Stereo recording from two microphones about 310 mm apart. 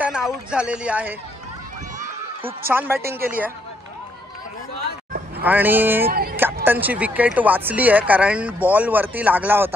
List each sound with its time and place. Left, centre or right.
0.0 s speech: centre
2.7 s speech: centre
5.4 s speech: centre
6.0 s speech: right
6.3 s speech: centre